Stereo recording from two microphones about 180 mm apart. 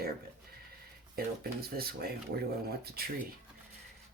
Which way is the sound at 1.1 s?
55° right (ahead or behind).